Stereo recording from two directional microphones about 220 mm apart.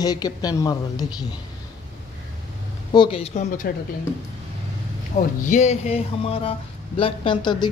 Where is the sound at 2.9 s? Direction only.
25° left (ahead or behind).